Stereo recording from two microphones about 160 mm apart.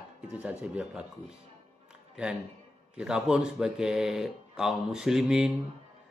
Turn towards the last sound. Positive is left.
turn(degrees=-5)  # may be behind; listen again after turning